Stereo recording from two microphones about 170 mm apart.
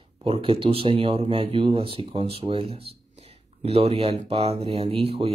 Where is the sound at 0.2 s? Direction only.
30° right (ahead or behind).